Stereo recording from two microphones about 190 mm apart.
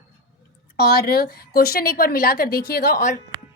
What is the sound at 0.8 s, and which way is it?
A woman's voice, 55° left (ahead or behind).